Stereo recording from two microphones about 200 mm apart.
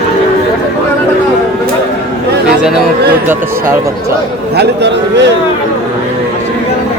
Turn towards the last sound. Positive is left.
turn(degrees=-60)  # may be behind; listen again after turning